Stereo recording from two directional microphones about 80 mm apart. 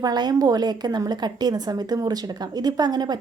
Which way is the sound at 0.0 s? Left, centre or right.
Right.